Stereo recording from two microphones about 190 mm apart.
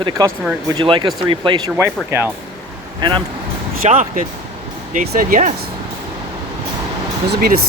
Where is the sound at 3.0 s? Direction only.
25° right (ahead or behind).